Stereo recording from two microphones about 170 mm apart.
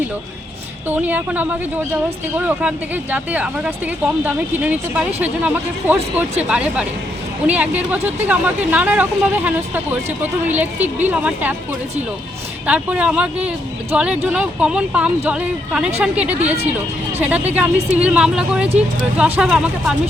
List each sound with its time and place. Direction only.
0.9 s speech: 10° right (ahead or behind)
12.6 s speech: 5° right (ahead or behind)